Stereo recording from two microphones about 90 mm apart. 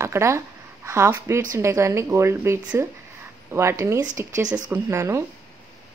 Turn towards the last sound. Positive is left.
turn(degrees=-30)  # may be behind; listen again after turning